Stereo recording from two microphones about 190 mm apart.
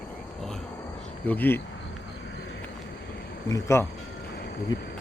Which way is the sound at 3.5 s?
15° left (ahead or behind).